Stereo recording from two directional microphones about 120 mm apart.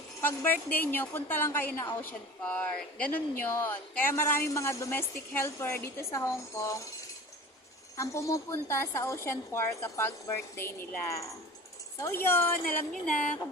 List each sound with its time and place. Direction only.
0.2 s a woman's voice: 15° left (ahead or behind)
7.9 s a woman's voice: 25° left (ahead or behind)